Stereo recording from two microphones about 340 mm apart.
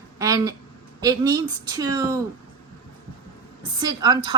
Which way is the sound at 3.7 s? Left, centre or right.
Centre.